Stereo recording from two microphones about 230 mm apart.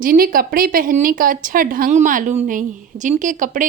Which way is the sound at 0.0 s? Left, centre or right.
Right.